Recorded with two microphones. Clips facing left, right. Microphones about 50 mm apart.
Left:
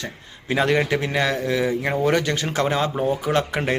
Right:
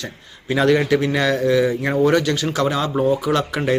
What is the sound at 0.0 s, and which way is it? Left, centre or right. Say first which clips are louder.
A man's voice: right 1 dB; left.